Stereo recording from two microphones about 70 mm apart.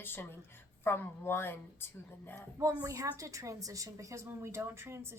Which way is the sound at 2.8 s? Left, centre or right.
Right.